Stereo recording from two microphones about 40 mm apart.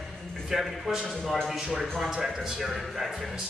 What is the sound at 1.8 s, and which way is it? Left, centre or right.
Speech, centre.